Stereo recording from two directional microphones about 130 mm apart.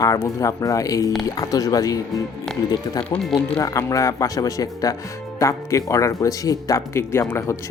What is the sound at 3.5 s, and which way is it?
Speech, 25° left (ahead or behind).